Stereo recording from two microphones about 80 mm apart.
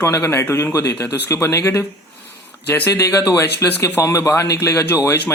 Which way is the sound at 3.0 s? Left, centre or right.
Left.